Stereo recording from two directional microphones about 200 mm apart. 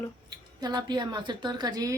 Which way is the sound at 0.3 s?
20° right (ahead or behind).